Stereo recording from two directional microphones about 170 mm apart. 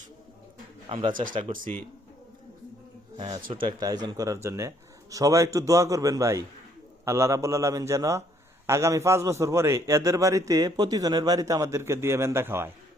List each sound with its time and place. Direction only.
0.9 s a man's voice: 30° right (ahead or behind)
3.2 s a man's voice: 30° right (ahead or behind)